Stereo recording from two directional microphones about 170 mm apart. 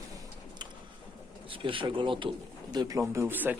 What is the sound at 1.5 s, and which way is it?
Speech, 30° right (ahead or behind).